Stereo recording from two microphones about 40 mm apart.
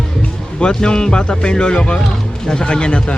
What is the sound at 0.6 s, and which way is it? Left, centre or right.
Speech, left.